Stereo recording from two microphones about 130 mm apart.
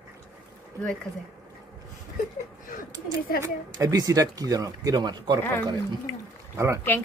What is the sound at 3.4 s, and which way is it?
Speech, 25° right (ahead or behind).